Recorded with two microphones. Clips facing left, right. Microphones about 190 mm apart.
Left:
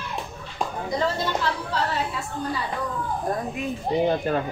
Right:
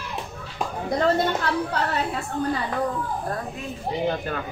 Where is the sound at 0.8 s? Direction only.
60° right (ahead or behind).